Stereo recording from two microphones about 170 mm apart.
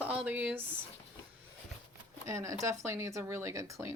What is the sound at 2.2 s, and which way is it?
Speech, 20° right (ahead or behind).